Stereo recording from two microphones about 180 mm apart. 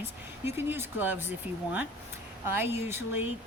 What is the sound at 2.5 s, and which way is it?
Speech, 10° right (ahead or behind).